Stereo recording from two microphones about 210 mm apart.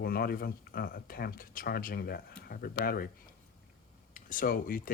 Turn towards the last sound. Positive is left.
turn(degrees=45)  # may be behind; listen again after turning